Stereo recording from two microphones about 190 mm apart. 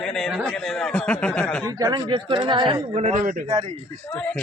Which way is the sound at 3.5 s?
25° right (ahead or behind).